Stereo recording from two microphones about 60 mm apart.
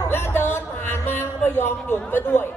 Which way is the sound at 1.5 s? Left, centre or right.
Left.